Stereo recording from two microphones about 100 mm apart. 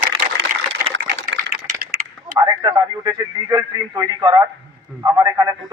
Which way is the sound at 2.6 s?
45° right (ahead or behind).